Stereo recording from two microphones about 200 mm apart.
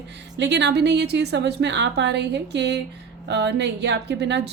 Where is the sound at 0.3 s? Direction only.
60° right (ahead or behind).